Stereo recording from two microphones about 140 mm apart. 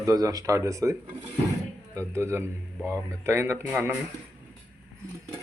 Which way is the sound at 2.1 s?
20° right (ahead or behind).